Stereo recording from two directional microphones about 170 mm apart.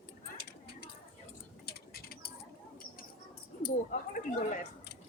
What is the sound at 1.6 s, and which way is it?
Bird, 65° left (ahead or behind).